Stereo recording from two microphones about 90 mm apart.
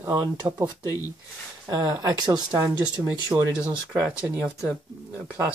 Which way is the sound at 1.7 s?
45° right (ahead or behind).